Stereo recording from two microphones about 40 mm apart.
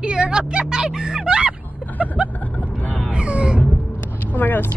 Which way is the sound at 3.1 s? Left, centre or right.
Right.